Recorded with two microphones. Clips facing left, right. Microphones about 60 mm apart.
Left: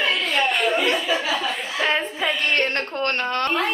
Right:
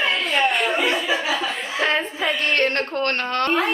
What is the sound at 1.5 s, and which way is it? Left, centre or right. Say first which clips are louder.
Chuckle: right 1 dB; centre.